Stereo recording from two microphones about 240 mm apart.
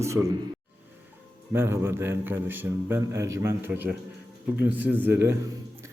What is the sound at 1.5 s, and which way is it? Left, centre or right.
A man's voice, centre.